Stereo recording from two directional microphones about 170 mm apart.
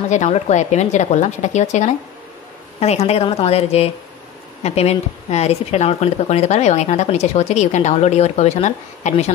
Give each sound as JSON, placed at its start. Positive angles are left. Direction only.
{"t": 0.1, "sound": "a woman's voice", "side_deg": 40}